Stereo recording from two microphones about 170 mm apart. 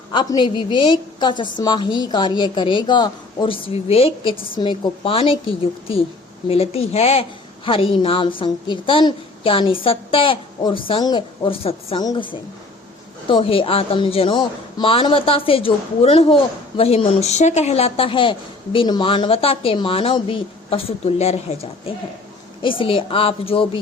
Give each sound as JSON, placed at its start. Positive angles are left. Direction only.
{"t": 0.1, "sound": "a woman's voice", "side_deg": 25}